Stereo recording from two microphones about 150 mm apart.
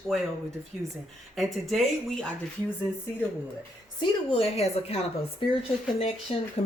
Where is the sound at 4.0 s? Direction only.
40° left (ahead or behind).